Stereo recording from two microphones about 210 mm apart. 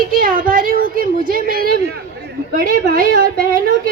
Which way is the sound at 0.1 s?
40° right (ahead or behind).